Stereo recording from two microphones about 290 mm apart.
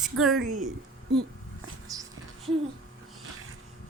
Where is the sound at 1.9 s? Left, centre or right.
Centre.